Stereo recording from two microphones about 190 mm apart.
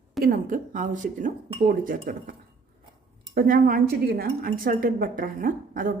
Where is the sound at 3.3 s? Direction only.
50° right (ahead or behind).